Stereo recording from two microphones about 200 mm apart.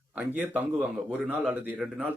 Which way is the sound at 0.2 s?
10° right (ahead or behind).